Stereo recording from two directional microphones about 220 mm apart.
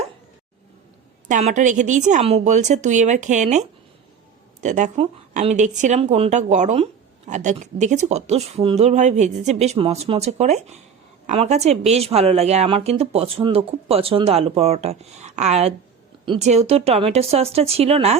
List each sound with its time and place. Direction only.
1.3 s a woman's voice: 35° right (ahead or behind)